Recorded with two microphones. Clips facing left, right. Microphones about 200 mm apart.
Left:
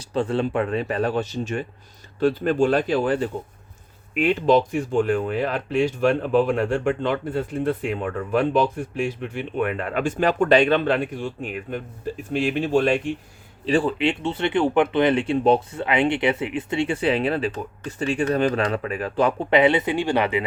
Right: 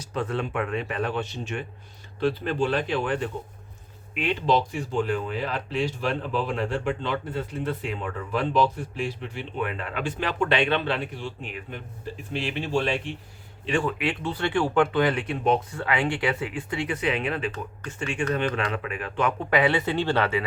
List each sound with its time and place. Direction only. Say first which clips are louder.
0.0 s speech: left 6 dB; 30° left (ahead or behind)
4.1 s speech: left 6 dB; 45° left (ahead or behind)
13.7 s speech: left 5 dB; 30° left (ahead or behind); by 20.4 s 15° left (ahead or behind)